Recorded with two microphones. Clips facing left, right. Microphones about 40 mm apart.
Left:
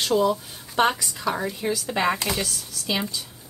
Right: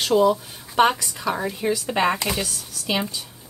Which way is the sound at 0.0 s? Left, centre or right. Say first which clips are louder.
Right 3 dB; centre.